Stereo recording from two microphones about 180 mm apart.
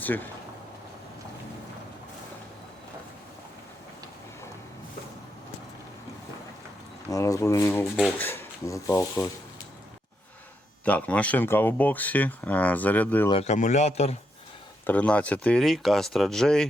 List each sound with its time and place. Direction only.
0.0 s speech: 10° left (ahead or behind)
7.1 s speech: 20° left (ahead or behind)
10.8 s speech: 10° left (ahead or behind)
13.4 s speech: 40° left (ahead or behind)
14.8 s speech: 10° left (ahead or behind)